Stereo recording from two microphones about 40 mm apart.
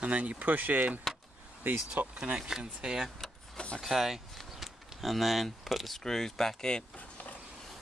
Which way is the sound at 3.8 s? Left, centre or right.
Centre.